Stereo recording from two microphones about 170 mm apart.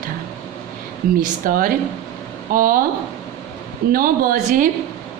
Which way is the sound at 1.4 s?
55° right (ahead or behind).